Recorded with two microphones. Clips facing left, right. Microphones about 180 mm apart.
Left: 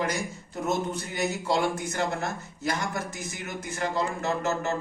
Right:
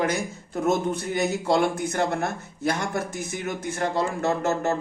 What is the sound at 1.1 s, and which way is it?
Speech, 55° right (ahead or behind).